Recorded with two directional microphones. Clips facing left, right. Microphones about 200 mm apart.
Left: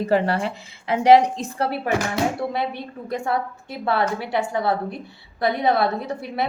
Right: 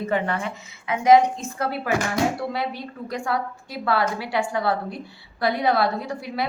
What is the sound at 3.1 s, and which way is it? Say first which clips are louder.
A woman's voice: left 2 dB; 25° left (ahead or behind).